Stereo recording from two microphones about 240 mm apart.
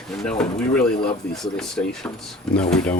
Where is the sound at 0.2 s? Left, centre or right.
Centre.